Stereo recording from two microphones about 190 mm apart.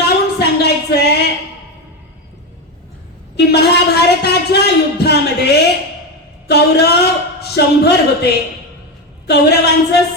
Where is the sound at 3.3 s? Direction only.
60° left (ahead or behind).